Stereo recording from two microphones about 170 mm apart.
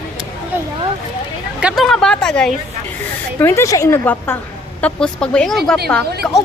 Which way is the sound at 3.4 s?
15° left (ahead or behind).